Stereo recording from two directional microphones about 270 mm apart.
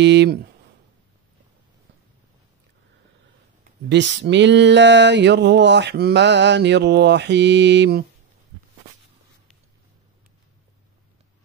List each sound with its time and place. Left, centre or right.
0.0 s speech: right
3.6 s speech: right